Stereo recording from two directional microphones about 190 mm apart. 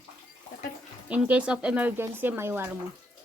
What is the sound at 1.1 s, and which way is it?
Speech, 5° right (ahead or behind).